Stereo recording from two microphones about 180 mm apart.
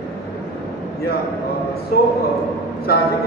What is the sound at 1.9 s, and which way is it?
Speech, 55° left (ahead or behind).